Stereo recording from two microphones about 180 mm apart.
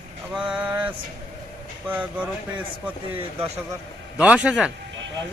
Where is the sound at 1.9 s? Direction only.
10° right (ahead or behind).